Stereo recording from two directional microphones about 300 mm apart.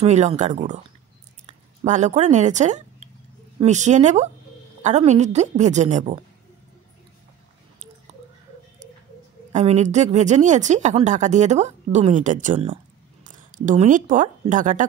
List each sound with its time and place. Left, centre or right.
0.0 s speech: right
9.5 s speech: right